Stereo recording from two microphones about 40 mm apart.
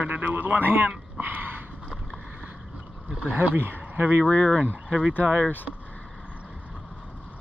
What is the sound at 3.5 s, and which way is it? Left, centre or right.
Speech, right.